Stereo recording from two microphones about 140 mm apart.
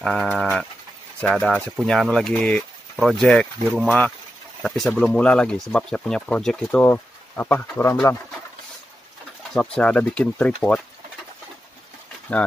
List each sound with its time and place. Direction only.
0.0 s speech: centre (ahead or behind)
0.4 s bird: 5° left (ahead or behind)
1.2 s speech: 5° left (ahead or behind)
9.5 s speech: 5° left (ahead or behind)
12.3 s speech: 10° left (ahead or behind)